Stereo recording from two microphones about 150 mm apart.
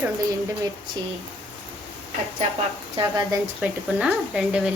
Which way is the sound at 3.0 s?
20° right (ahead or behind).